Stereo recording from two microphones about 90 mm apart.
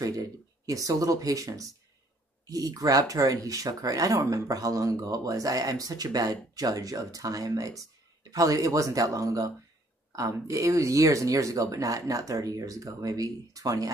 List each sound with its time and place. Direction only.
0.0 s speech: 40° right (ahead or behind)